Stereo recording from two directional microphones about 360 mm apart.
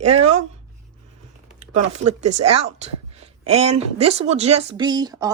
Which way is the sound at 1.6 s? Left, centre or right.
Centre.